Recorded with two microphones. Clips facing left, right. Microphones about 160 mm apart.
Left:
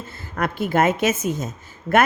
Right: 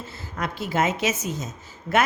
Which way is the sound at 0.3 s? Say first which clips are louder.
Left 5 dB; 55° left (ahead or behind).